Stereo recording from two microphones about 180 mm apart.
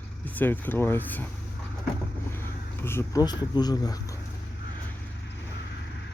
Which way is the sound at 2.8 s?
15° left (ahead or behind).